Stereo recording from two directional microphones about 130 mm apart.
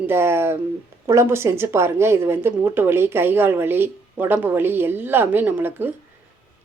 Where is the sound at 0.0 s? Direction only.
20° right (ahead or behind).